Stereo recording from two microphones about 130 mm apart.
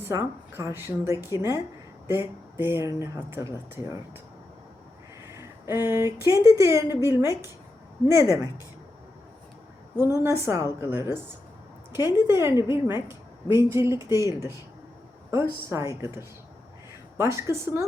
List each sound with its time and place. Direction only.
0.1 s a woman's voice: 25° right (ahead or behind)
5.3 s a woman's voice: 20° right (ahead or behind)
10.2 s a woman's voice: 25° right (ahead or behind)